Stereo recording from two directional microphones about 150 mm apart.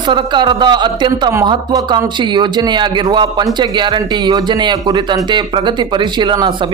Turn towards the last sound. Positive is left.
turn(degrees=-30)  # may be behind; listen again after turning